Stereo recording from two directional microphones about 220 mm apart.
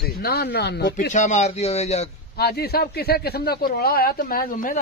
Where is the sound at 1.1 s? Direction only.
35° left (ahead or behind).